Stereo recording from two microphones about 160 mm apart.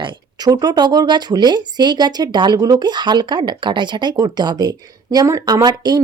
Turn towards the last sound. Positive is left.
turn(degrees=-25)  # may be behind; listen again after turning